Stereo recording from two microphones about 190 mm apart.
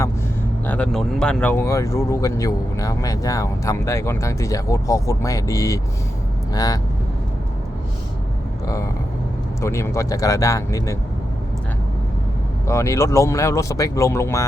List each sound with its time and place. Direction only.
0.7 s speech: 5° left (ahead or behind)
8.6 s speech: 15° left (ahead or behind)
12.6 s speech: 15° left (ahead or behind)